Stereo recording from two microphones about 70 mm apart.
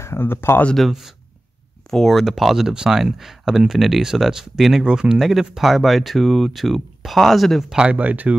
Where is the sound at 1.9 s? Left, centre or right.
Centre.